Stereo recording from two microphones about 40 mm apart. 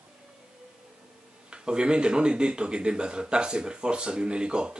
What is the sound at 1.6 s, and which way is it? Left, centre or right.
A man's voice, right.